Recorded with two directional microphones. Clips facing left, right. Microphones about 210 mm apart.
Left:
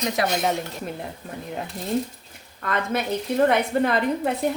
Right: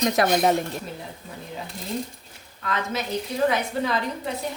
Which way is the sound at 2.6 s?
55° left (ahead or behind).